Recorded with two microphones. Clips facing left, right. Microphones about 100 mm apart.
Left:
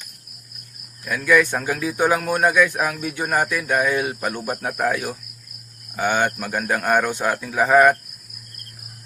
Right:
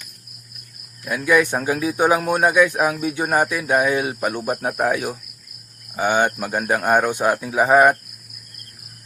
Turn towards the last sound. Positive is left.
turn(degrees=-15)  # may be behind; listen again after turning